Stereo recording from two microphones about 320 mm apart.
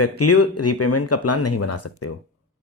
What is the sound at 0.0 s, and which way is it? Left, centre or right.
Speech, left.